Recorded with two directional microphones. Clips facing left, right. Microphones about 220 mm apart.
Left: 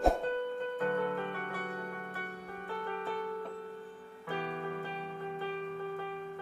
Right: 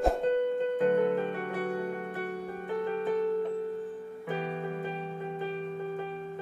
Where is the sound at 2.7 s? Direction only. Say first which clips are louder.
Right 9 dB; 20° right (ahead or behind).